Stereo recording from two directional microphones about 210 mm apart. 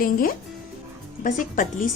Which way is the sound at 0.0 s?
40° left (ahead or behind).